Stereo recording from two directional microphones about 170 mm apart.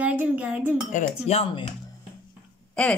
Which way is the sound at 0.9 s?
35° left (ahead or behind).